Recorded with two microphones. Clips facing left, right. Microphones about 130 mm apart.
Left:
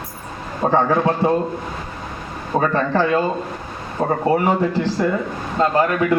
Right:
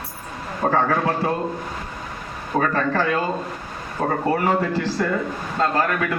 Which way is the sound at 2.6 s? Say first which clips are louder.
Left 3 dB; 20° left (ahead or behind).